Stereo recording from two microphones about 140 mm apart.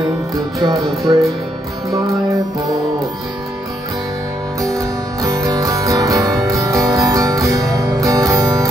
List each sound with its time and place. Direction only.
0.6 s music: 30° right (ahead or behind)
4.7 s music: 25° right (ahead or behind)